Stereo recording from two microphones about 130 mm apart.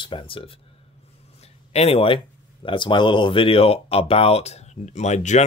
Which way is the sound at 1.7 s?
50° left (ahead or behind).